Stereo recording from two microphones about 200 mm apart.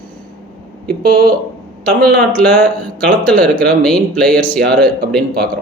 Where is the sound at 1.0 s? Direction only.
50° right (ahead or behind).